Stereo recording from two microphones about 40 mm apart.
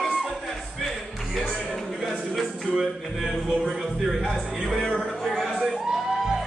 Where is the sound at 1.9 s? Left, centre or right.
Centre.